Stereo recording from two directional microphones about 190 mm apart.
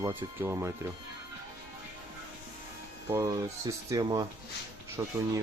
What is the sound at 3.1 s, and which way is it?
Speech, 15° right (ahead or behind).